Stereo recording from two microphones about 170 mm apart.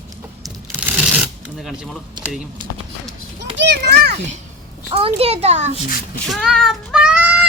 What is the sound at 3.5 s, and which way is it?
Children playing, 90° right.